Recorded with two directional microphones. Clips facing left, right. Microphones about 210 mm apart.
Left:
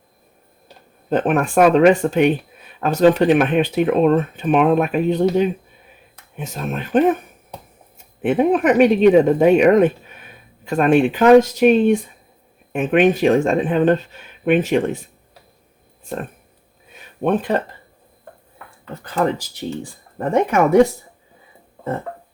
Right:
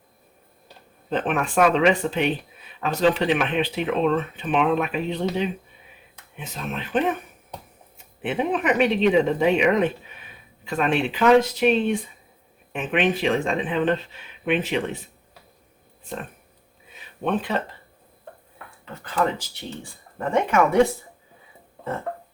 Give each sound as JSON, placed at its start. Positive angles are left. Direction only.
{"t": 1.1, "sound": "speech", "side_deg": 45}
{"t": 8.2, "sound": "speech", "side_deg": 50}
{"t": 17.2, "sound": "speech", "side_deg": 50}
{"t": 20.1, "sound": "speech", "side_deg": 40}